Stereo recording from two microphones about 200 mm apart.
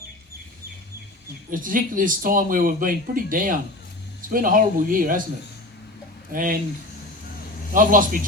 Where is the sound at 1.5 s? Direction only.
45° right (ahead or behind).